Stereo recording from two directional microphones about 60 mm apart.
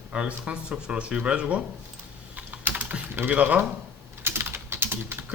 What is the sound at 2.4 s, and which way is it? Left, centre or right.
Typing, right.